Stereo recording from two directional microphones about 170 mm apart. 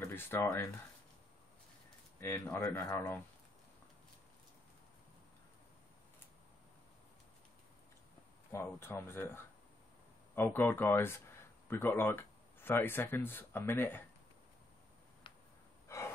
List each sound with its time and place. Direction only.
0.0 s speech: 15° left (ahead or behind)
2.1 s speech: 15° left (ahead or behind)
8.5 s speech: 15° left (ahead or behind)
15.9 s gasp: 15° left (ahead or behind)